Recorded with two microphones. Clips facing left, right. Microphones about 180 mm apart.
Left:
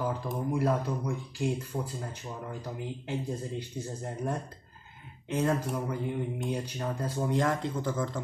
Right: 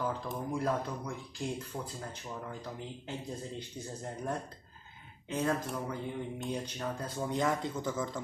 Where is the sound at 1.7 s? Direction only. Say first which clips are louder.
Left 5 dB; 20° left (ahead or behind).